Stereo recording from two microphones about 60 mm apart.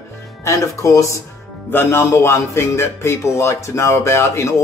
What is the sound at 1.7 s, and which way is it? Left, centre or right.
Speech, left.